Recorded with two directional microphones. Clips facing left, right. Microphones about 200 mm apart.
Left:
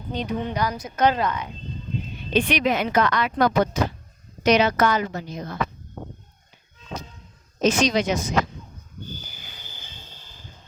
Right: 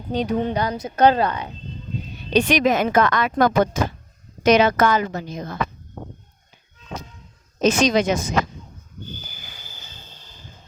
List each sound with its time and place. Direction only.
0.3 s speech: 30° right (ahead or behind)
7.6 s speech: 50° right (ahead or behind)